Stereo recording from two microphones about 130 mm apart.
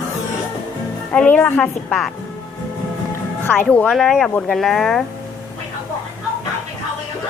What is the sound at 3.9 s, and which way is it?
Speech, centre (ahead or behind).